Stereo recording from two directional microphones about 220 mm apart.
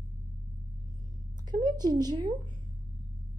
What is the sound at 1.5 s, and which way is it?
Speech, 20° right (ahead or behind).